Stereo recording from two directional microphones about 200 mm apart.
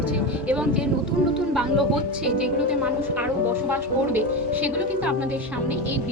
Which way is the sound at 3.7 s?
10° right (ahead or behind).